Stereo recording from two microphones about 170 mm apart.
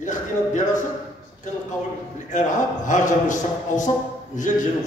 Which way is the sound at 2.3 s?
50° left (ahead or behind).